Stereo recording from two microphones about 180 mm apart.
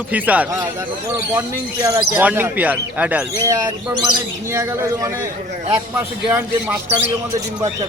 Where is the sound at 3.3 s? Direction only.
20° right (ahead or behind).